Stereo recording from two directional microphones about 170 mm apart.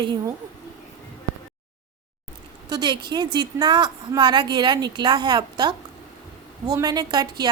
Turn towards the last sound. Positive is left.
turn(degrees=-25)  # may be behind; listen again after turning